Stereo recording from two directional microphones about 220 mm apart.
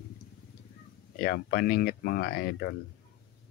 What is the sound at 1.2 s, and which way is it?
Speech, 45° left (ahead or behind).